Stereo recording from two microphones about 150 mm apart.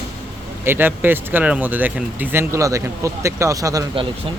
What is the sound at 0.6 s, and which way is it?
Speech, 15° right (ahead or behind).